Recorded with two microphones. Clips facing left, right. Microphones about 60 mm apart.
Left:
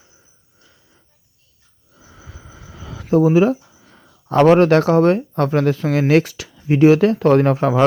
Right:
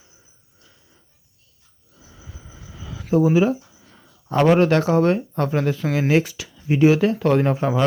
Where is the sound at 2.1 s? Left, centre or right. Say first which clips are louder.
Left 3 dB; left.